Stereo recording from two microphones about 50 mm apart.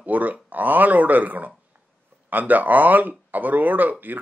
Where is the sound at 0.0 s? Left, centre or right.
Right.